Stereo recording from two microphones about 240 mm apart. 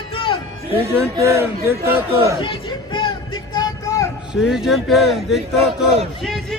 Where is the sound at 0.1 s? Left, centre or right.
Left.